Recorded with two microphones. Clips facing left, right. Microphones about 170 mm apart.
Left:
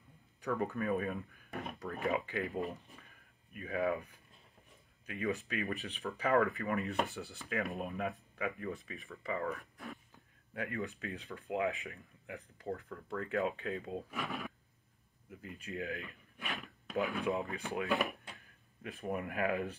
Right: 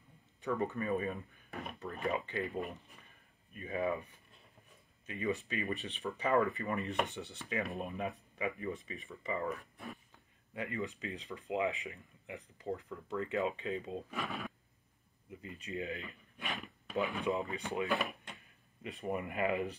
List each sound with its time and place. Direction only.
0.5 s speech: centre (ahead or behind)
9.4 s speech: 20° right (ahead or behind)
10.5 s speech: centre (ahead or behind)